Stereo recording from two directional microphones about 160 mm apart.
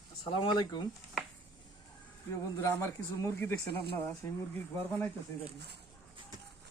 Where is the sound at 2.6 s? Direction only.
15° left (ahead or behind).